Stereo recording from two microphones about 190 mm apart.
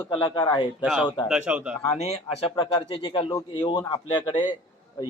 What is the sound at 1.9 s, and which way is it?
Speech, 35° left (ahead or behind).